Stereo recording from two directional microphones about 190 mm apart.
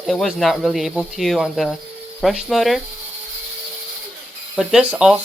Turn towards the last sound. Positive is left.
turn(degrees=-5)  # may be behind; listen again after turning